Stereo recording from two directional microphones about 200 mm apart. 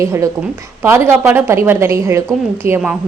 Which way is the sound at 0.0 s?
15° right (ahead or behind).